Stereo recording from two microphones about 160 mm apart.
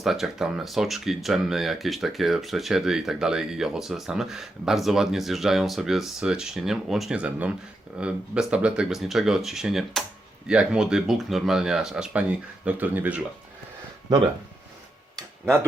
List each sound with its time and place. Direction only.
0.0 s speech: centre (ahead or behind)